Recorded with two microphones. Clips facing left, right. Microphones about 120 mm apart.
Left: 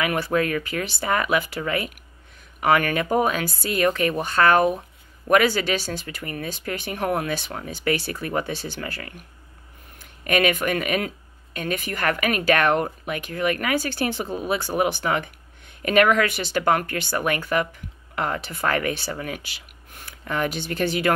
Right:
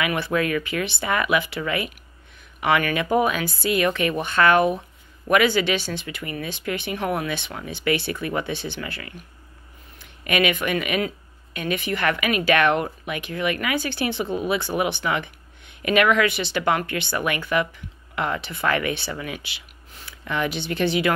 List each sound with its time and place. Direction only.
0.0 s speech: 40° left (ahead or behind)